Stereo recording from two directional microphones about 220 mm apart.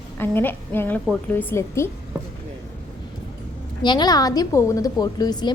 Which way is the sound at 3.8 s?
20° left (ahead or behind).